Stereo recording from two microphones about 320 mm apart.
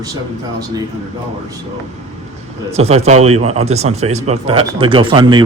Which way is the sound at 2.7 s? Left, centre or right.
Centre.